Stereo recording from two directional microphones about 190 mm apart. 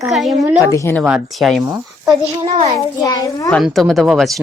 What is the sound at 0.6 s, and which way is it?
Speech, 15° left (ahead or behind).